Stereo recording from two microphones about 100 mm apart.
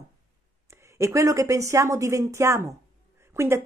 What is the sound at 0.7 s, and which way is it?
A woman's voice, 30° right (ahead or behind).